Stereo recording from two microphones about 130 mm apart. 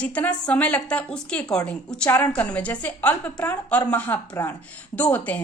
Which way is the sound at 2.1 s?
20° left (ahead or behind).